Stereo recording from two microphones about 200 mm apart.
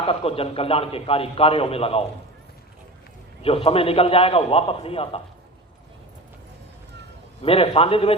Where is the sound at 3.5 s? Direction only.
30° left (ahead or behind).